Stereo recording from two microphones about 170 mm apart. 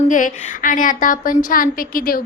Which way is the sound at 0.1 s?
50° left (ahead or behind).